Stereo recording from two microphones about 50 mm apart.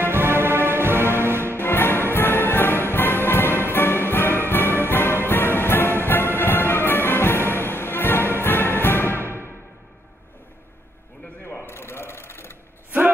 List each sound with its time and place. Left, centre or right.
0.0 s music: right
1.6 s music: left
9.2 s music: right
11.6 s a sound: left